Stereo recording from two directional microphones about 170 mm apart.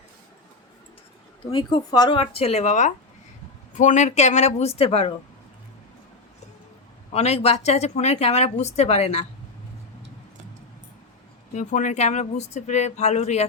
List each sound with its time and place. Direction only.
1.5 s a woman's voice: 30° left (ahead or behind)
7.1 s a woman's voice: 35° left (ahead or behind)
11.5 s speech: 45° left (ahead or behind)